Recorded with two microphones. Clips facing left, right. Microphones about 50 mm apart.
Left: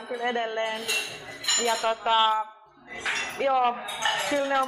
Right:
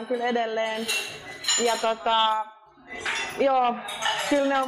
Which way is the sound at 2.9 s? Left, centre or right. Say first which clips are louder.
Even; centre.